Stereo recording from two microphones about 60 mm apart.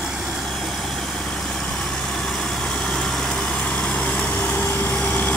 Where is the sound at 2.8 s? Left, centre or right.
Centre.